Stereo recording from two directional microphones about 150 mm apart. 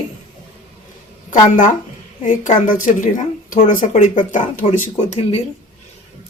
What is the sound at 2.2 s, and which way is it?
A woman's voice, 60° left (ahead or behind).